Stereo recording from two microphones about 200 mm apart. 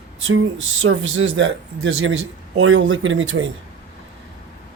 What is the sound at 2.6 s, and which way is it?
Speech, 75° right (ahead or behind).